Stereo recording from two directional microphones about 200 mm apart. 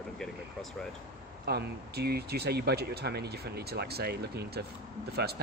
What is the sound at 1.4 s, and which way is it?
Speech, 55° right (ahead or behind).